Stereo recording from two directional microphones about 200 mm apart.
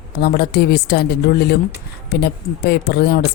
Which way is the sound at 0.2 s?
55° left (ahead or behind).